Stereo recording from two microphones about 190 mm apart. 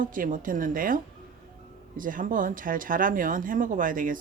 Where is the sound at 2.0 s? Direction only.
45° right (ahead or behind).